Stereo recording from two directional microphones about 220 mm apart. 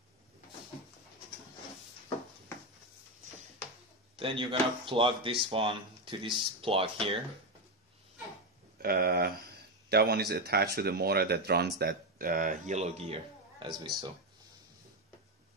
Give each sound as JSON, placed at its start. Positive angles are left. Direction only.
{"t": 4.2, "sound": "speech", "side_deg": -25}
{"t": 8.8, "sound": "speech", "side_deg": -45}